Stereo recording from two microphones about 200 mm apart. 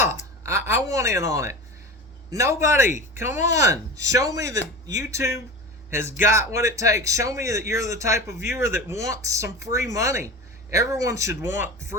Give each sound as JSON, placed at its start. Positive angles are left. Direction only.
{"t": 0.0, "sound": "a man's voice", "side_deg": -15}